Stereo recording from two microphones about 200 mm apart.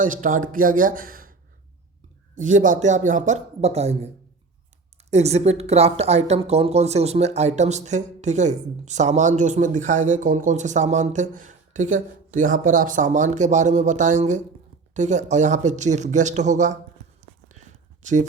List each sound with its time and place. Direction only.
0.0 s a woman's voice: 40° right (ahead or behind)
5.1 s a woman's voice: 30° right (ahead or behind)
17.6 s a sound: 35° right (ahead or behind)